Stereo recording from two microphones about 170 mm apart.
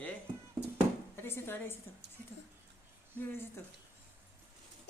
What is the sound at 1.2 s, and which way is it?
Speech, 15° left (ahead or behind).